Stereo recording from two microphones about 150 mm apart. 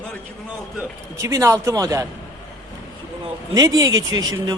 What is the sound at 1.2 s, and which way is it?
Speech, 20° right (ahead or behind).